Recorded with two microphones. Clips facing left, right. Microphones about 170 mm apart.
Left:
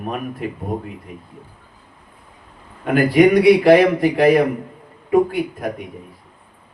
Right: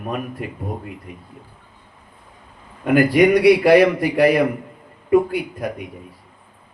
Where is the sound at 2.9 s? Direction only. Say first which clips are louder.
Left 1 dB; 45° left (ahead or behind).